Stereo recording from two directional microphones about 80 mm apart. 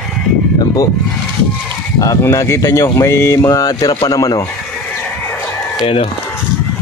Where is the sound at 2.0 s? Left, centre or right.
Left.